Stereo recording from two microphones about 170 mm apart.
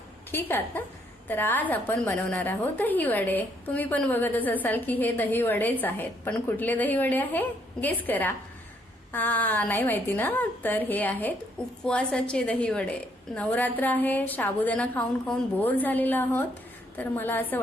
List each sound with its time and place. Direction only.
0.3 s a woman's voice: 10° left (ahead or behind)